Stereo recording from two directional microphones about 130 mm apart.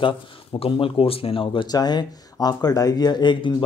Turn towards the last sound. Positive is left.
turn(degrees=35)  # may be behind; listen again after turning